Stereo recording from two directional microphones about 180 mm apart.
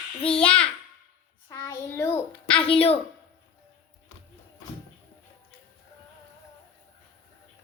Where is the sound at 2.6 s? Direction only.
30° left (ahead or behind).